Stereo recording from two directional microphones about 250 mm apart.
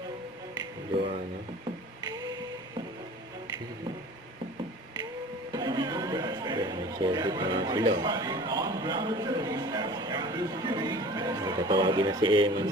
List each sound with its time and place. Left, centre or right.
5.5 s speech: centre